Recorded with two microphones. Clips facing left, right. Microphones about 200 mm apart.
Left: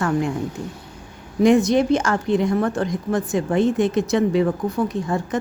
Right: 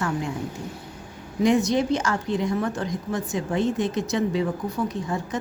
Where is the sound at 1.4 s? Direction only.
55° left (ahead or behind).